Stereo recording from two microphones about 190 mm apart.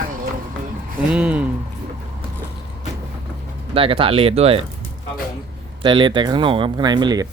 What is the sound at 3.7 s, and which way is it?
Speech, 30° right (ahead or behind).